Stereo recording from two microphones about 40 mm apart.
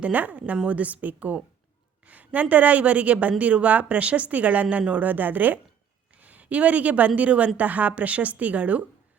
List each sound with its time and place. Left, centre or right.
0.0 s a woman's voice: right